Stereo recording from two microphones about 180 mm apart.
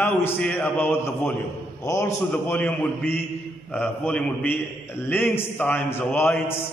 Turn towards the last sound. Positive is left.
turn(degrees=10)  # may be behind; listen again after turning